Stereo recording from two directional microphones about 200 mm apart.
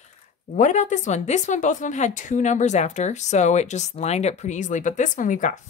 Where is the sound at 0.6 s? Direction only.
40° left (ahead or behind).